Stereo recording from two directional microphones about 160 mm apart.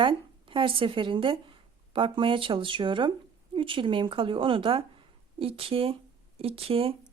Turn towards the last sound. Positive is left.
turn(degrees=-35)  # may be behind; listen again after turning